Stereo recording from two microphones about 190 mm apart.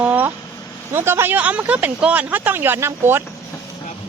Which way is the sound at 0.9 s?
10° right (ahead or behind).